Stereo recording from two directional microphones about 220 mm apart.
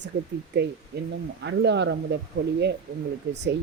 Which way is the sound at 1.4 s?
50° right (ahead or behind).